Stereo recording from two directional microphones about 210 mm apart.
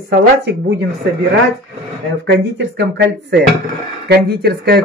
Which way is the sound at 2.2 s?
55° right (ahead or behind).